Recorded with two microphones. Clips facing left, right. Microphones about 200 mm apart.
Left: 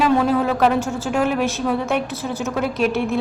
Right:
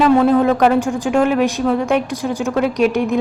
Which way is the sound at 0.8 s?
15° right (ahead or behind).